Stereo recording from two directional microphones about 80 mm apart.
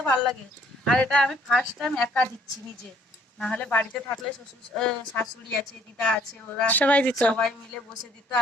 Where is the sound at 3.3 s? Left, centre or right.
Centre.